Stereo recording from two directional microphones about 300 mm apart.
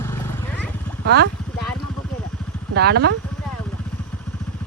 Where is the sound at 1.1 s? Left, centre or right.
Right.